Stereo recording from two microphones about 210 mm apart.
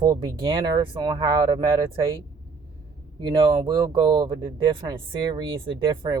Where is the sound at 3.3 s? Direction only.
20° right (ahead or behind).